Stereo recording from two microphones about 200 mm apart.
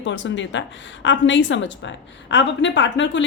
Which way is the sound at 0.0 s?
65° left (ahead or behind).